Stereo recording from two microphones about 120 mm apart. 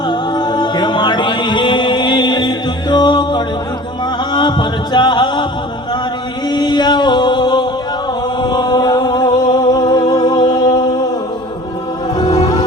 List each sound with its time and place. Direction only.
0.1 s music: 35° left (ahead or behind)
4.3 s a sound: 35° left (ahead or behind)
6.5 s music: 35° left (ahead or behind)
12.1 s music: 35° left (ahead or behind)